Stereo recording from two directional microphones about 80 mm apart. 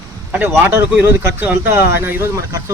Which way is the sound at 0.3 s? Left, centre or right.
Right.